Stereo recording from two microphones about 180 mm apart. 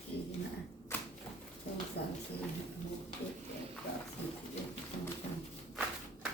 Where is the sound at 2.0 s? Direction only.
65° left (ahead or behind).